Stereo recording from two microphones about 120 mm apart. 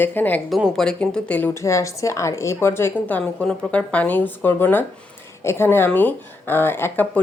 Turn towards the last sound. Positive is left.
turn(degrees=15)  # may be behind; listen again after turning